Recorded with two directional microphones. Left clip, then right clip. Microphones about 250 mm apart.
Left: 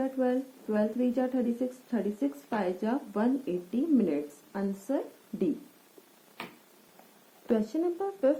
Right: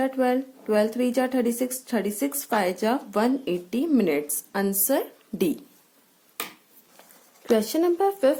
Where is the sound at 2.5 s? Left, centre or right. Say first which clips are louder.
Right 9 dB; right.